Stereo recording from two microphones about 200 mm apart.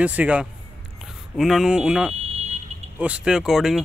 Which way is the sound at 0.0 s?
5° right (ahead or behind).